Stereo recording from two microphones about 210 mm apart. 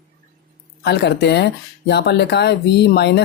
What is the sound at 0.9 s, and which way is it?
Speech, 50° left (ahead or behind).